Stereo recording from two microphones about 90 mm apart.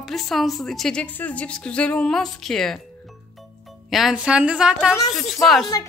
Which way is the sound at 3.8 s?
5° right (ahead or behind).